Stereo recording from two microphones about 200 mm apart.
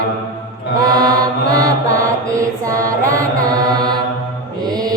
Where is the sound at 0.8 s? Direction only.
20° right (ahead or behind).